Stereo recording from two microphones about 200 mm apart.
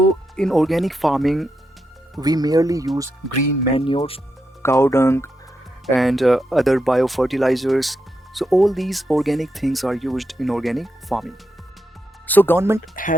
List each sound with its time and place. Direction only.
0.3 s speech: centre (ahead or behind)
2.2 s speech: 20° right (ahead or behind)
3.8 s speech: 25° left (ahead or behind)
4.6 s speech: 15° left (ahead or behind)
5.8 s speech: centre (ahead or behind)
12.3 s speech: 10° left (ahead or behind)
12.5 s speech: 15° right (ahead or behind)